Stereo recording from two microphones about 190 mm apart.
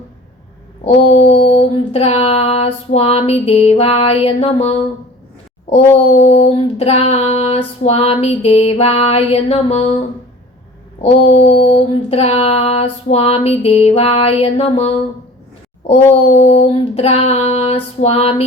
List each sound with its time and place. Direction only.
1.0 s female singing: 30° left (ahead or behind)
11.4 s female singing: 30° left (ahead or behind)
16.3 s female singing: 30° left (ahead or behind)